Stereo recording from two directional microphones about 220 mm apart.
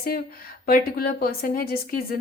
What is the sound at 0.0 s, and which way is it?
A woman's voice, 40° left (ahead or behind).